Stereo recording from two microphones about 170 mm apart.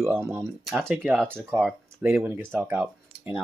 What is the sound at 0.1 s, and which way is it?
Speech, 15° right (ahead or behind).